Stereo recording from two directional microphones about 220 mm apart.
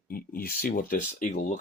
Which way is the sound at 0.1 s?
40° left (ahead or behind).